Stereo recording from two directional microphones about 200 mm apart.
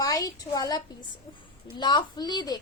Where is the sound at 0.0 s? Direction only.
15° left (ahead or behind).